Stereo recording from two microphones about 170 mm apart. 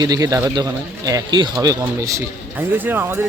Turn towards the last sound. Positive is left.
turn(degrees=-10)  # may be behind; listen again after turning